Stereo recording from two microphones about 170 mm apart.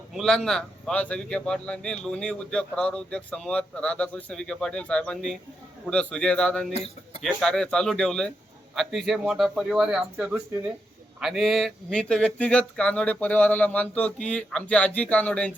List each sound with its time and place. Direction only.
0.1 s a man's voice: centre (ahead or behind)
6.7 s speech: 35° left (ahead or behind)
7.2 s a man's voice: centre (ahead or behind)